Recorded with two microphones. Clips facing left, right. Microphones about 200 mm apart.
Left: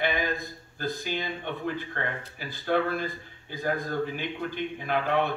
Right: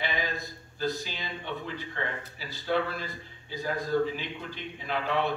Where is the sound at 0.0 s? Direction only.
55° left (ahead or behind).